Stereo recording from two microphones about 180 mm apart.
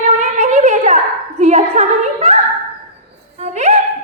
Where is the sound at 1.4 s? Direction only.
40° right (ahead or behind).